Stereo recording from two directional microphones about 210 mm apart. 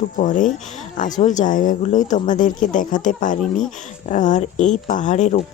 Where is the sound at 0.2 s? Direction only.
40° left (ahead or behind).